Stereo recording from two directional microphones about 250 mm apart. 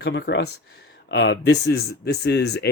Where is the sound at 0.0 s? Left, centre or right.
Left.